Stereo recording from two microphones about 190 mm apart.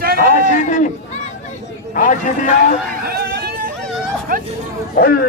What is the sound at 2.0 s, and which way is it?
Speech, 40° left (ahead or behind).